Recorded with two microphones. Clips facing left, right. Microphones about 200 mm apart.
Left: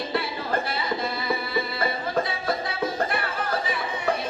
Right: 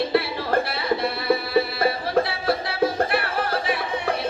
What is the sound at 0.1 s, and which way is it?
Music, 65° right (ahead or behind).